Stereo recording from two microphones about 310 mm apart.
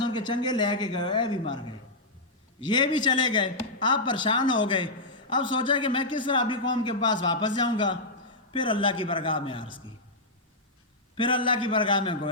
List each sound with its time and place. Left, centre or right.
0.0 s a man's voice: centre
11.1 s a man's voice: centre